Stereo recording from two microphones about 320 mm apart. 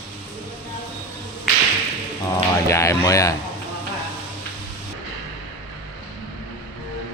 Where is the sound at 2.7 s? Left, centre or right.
Centre.